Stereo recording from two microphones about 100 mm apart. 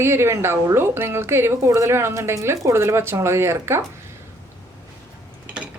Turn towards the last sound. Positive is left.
turn(degrees=-25)  # may be behind; listen again after turning